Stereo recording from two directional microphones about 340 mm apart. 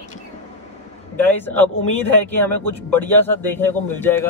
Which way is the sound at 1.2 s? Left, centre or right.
Centre.